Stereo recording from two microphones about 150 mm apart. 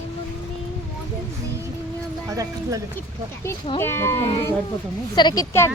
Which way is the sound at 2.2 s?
25° right (ahead or behind).